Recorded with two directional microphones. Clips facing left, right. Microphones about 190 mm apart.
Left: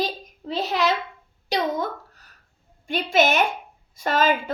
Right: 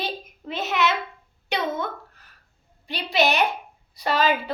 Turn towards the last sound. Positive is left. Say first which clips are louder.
# left 1 dB
turn(degrees=45)  # may be behind; listen again after turning